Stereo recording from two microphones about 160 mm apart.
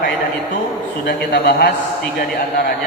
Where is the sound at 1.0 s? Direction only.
90° left.